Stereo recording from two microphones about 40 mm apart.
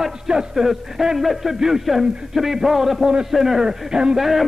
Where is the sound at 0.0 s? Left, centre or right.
Centre.